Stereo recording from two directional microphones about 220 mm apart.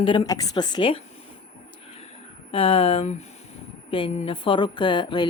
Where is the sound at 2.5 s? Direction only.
25° left (ahead or behind).